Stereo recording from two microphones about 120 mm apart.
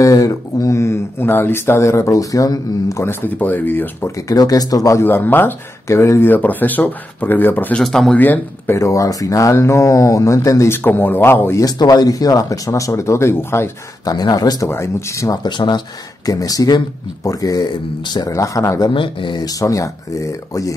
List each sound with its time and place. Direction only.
0.0 s speech: 30° left (ahead or behind)
4.3 s speech: 30° left (ahead or behind); by 7.8 s 15° left (ahead or behind)
7.8 s speech: 5° left (ahead or behind)
8.2 s speech: 15° left (ahead or behind)
11.6 s speech: 35° left (ahead or behind)
14.0 s speech: 35° left (ahead or behind)
15.4 s speech: 40° left (ahead or behind)
18.9 s speech: 45° left (ahead or behind); by 20.7 s 30° left (ahead or behind)